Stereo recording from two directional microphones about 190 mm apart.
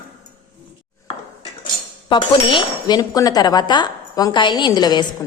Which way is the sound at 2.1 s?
25° left (ahead or behind).